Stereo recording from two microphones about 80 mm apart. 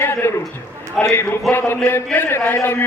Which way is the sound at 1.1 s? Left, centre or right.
Left.